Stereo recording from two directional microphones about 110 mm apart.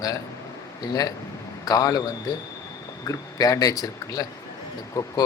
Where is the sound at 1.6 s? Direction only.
35° left (ahead or behind).